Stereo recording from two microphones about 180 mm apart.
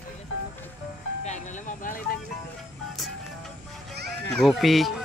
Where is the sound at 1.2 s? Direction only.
40° left (ahead or behind).